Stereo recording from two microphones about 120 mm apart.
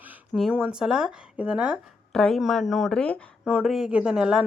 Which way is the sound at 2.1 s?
5° left (ahead or behind).